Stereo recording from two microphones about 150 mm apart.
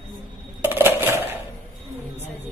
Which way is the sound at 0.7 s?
15° right (ahead or behind).